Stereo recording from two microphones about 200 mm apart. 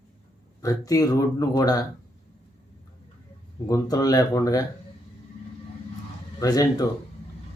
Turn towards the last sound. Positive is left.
turn(degrees=20)  # may be behind; listen again after turning